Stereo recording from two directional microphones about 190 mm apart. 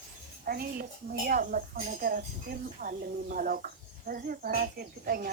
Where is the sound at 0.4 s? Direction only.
50° right (ahead or behind).